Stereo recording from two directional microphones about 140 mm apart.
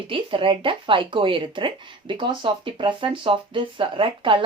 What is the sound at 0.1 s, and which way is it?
Speech, 40° right (ahead or behind).